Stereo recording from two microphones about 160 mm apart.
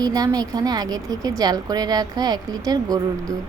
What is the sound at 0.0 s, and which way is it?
Speech, 25° right (ahead or behind).